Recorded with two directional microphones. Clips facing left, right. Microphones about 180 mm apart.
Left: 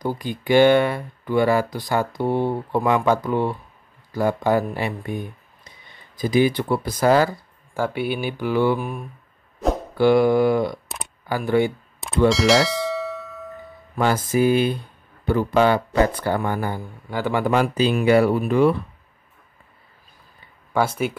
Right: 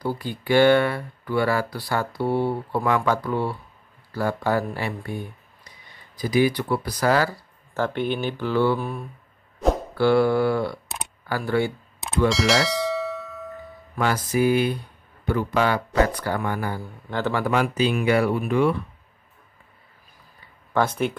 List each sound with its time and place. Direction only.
0.0 s speech: 20° left (ahead or behind)
7.7 s speech: 10° left (ahead or behind)
12.3 s bell: centre (ahead or behind)
13.9 s music: 25° left (ahead or behind)
14.3 s speech: 25° left (ahead or behind)
17.5 s speech: 35° left (ahead or behind)
20.7 s speech: 10° left (ahead or behind)